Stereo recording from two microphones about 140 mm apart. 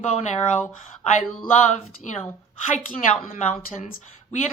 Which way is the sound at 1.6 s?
60° left (ahead or behind).